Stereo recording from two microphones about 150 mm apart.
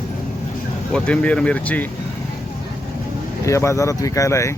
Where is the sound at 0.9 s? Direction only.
5° left (ahead or behind).